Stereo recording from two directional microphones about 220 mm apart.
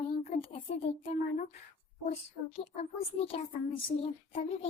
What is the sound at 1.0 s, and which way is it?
A woman's voice, 35° left (ahead or behind).